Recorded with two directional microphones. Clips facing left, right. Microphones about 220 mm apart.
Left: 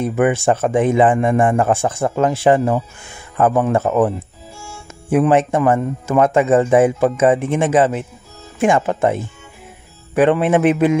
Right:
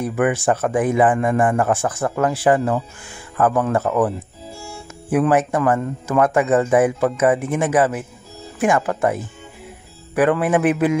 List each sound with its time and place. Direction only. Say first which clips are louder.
0.0 s speech: left 3 dB; 25° left (ahead or behind)
5.1 s speech: left 3 dB; 25° left (ahead or behind)